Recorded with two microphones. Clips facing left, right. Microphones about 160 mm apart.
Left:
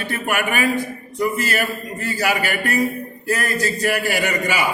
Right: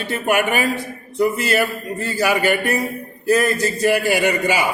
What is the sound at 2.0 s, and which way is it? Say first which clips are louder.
A man's voice: right 3 dB; 25° right (ahead or behind).